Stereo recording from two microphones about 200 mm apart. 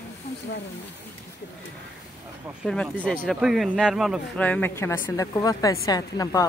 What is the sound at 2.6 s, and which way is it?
Speech, 5° left (ahead or behind).